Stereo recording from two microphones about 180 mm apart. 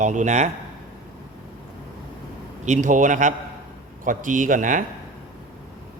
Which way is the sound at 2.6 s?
40° right (ahead or behind).